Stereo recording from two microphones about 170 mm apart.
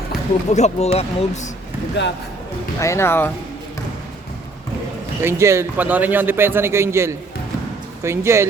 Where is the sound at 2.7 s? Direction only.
15° left (ahead or behind).